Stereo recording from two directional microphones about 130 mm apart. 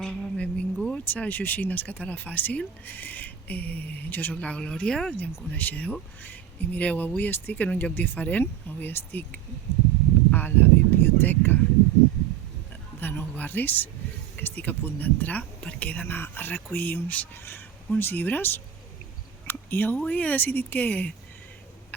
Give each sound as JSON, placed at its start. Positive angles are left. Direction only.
{"t": 0.0, "sound": "speech", "side_deg": 10}
{"t": 13.0, "sound": "speech", "side_deg": 15}